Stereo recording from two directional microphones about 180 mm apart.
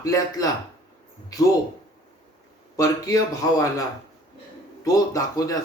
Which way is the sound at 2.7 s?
20° left (ahead or behind).